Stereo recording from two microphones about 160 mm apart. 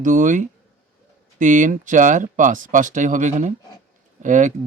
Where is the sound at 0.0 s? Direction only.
55° right (ahead or behind).